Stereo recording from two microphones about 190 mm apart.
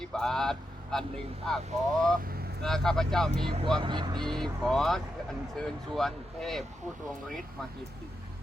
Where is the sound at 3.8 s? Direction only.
25° right (ahead or behind).